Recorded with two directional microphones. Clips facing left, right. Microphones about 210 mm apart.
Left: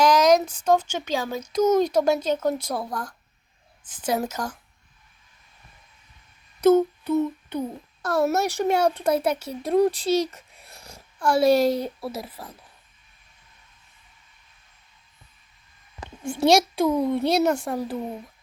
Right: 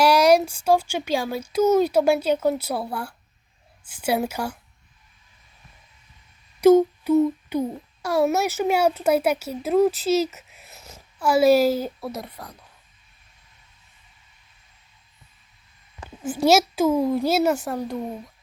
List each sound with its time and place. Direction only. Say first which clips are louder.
0.0 s speech: right 1 dB; 10° right (ahead or behind)
6.6 s speech: right 3 dB; 10° right (ahead or behind)
16.0 s a woman's voice: right 1 dB; 5° right (ahead or behind)
17.7 s a woman's voice: even; 5° left (ahead or behind)